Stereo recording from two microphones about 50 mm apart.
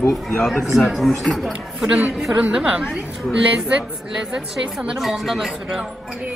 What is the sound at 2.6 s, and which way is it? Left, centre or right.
Speech, right.